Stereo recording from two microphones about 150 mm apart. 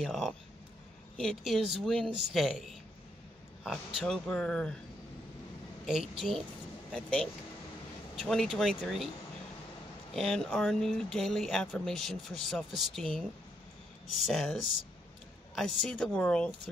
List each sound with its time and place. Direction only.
0.0 s speech: 5° left (ahead or behind)
5.9 s speech: 5° right (ahead or behind)
10.1 s speech: 5° left (ahead or behind)
14.2 s speech: centre (ahead or behind)